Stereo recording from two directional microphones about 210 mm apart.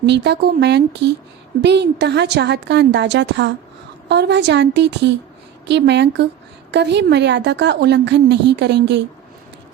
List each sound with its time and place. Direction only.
0.0 s a woman's voice: 55° right (ahead or behind)